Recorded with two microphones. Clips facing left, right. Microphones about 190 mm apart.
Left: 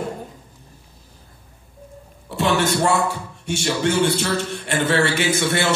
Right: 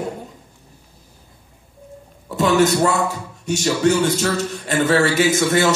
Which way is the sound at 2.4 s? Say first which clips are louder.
Right 4 dB; 40° right (ahead or behind).